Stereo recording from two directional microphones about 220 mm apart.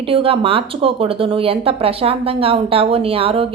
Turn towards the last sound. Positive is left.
turn(degrees=-25)  # may be behind; listen again after turning